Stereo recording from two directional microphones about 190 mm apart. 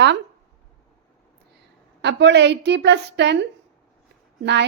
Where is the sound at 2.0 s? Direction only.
65° right (ahead or behind).